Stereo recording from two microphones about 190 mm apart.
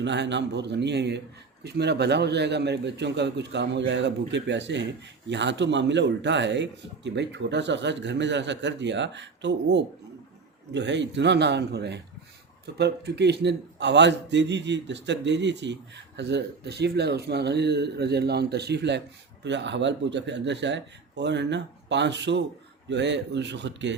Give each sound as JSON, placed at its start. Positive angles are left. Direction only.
{"t": 0.0, "sound": "a man's voice", "side_deg": -65}